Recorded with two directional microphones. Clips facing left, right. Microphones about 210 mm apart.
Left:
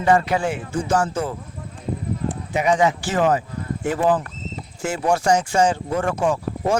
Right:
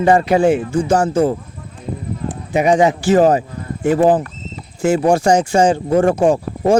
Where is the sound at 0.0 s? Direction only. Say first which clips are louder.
Right 4 dB; 30° right (ahead or behind).